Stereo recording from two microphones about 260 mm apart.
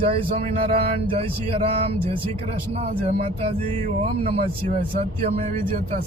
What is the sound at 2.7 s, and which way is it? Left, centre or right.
Speech, right.